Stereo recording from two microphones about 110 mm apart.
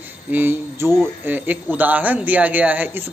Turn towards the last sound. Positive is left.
turn(degrees=-15)  # may be behind; listen again after turning